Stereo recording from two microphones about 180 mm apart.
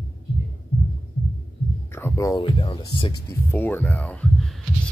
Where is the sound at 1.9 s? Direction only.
15° left (ahead or behind).